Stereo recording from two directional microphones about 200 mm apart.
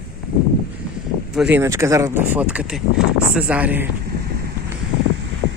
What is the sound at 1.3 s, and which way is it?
Speech, 5° right (ahead or behind).